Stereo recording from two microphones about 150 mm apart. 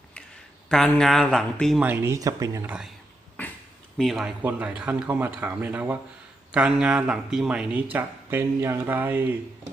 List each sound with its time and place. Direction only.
0.7 s speech: 5° left (ahead or behind)
1.8 s speech: 15° right (ahead or behind)
2.6 s speech: 5° right (ahead or behind)
3.9 s speech: centre (ahead or behind)